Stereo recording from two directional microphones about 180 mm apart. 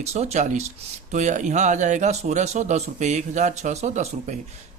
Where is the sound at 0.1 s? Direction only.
35° right (ahead or behind).